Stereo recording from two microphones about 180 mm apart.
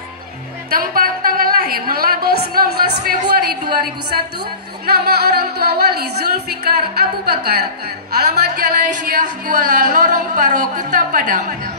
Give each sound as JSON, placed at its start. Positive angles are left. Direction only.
{"t": 0.7, "sound": "a woman's voice", "side_deg": -55}
{"t": 4.8, "sound": "speech", "side_deg": -60}